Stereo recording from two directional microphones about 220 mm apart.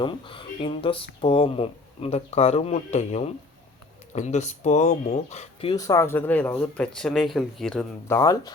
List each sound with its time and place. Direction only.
0.0 s speech: 25° left (ahead or behind)
5.7 s speech: 15° left (ahead or behind)